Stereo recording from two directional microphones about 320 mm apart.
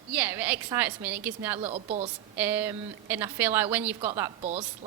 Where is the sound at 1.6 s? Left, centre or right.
Centre.